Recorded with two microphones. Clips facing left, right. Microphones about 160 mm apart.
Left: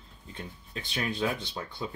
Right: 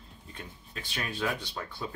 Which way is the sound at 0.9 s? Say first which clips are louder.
Left 3 dB; 20° left (ahead or behind).